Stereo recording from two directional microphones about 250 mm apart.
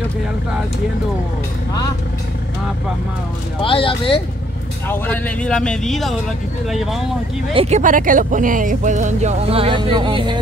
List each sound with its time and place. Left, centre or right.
3.6 s speech: left
4.8 s a man's voice: centre
7.5 s speech: right